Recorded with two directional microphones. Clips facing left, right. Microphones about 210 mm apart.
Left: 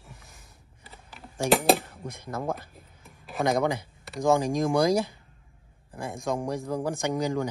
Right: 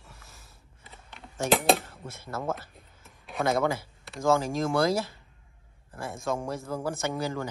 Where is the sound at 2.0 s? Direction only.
15° left (ahead or behind).